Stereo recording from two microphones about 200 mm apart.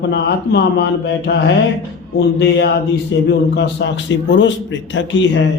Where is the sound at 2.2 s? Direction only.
55° left (ahead or behind).